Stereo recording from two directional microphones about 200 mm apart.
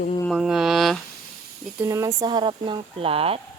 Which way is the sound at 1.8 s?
15° right (ahead or behind).